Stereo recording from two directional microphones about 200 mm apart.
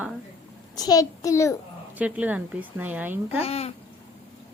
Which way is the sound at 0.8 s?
20° left (ahead or behind).